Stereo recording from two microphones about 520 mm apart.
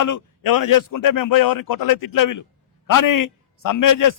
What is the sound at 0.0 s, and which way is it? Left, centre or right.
A man's voice, left.